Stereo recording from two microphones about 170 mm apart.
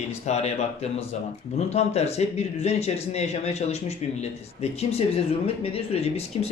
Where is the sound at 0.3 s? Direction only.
40° left (ahead or behind).